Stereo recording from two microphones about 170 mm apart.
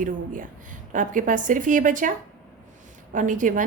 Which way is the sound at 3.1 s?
50° right (ahead or behind).